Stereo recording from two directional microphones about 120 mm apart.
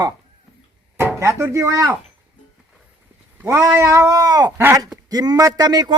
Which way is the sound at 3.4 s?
20° right (ahead or behind).